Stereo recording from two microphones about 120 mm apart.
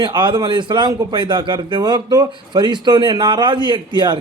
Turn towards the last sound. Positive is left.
turn(degrees=-40)  # may be behind; listen again after turning